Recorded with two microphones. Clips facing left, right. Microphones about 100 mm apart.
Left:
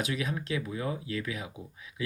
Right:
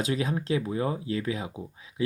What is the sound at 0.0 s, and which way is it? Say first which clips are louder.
Speech: right 4 dB; 30° right (ahead or behind).